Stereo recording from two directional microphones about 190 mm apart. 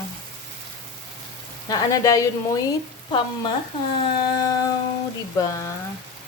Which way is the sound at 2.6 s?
25° left (ahead or behind).